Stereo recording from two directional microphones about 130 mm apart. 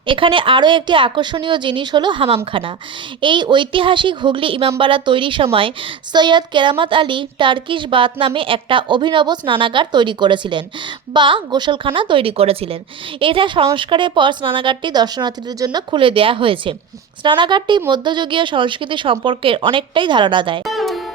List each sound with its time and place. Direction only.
0.0 s a woman's voice: 40° right (ahead or behind)
20.7 s music: centre (ahead or behind)